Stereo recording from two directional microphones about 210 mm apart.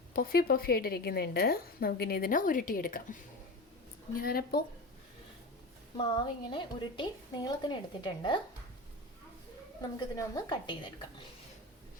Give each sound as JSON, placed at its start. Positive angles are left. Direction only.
{"t": 0.1, "sound": "a woman's voice", "side_deg": 45}
{"t": 6.0, "sound": "a woman's voice", "side_deg": 25}
{"t": 10.2, "sound": "a woman's voice", "side_deg": 20}